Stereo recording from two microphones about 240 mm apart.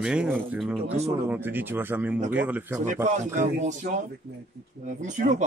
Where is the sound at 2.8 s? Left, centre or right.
Right.